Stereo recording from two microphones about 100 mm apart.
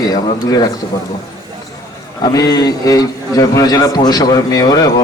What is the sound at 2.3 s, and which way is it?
A man's voice, 35° left (ahead or behind).